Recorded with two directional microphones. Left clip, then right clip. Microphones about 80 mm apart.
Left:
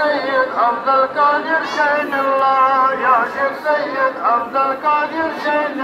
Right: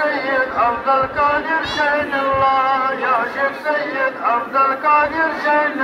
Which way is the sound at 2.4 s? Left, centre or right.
Right.